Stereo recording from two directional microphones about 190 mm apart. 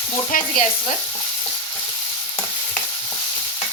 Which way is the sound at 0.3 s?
45° left (ahead or behind).